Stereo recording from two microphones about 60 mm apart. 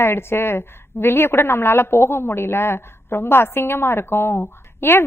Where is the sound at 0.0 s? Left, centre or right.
Left.